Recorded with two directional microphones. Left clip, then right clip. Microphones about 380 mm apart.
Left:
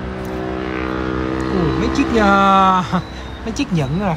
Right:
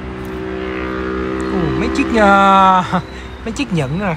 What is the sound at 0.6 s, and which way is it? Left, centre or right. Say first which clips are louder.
Vehicle: right 1 dB; left.